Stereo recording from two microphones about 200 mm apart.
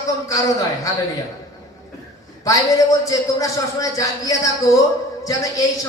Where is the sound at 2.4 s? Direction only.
15° left (ahead or behind).